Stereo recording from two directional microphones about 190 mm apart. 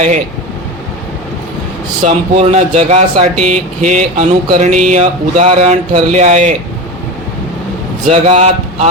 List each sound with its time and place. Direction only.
2.0 s speech: 35° right (ahead or behind)
8.1 s speech: 35° right (ahead or behind)